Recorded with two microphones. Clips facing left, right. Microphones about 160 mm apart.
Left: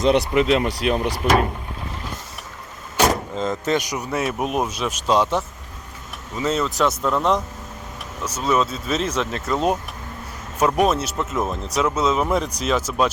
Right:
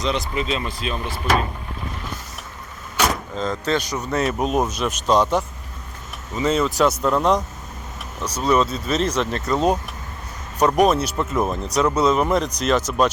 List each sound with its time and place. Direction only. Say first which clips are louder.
0.0 s speech: left 7 dB; 60° left (ahead or behind)
3.3 s speech: left 1 dB; 20° left (ahead or behind)